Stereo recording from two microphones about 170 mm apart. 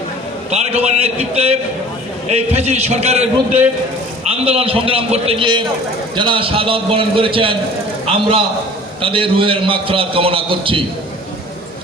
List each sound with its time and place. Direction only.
0.5 s a man's voice: 40° right (ahead or behind)
9.0 s a man's voice: 30° right (ahead or behind)